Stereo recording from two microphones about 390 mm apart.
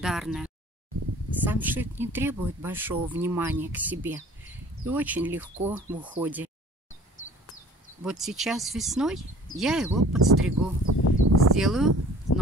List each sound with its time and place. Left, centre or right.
0.0 s speech: centre
8.0 s speech: centre
10.1 s a sound: right
11.5 s speech: centre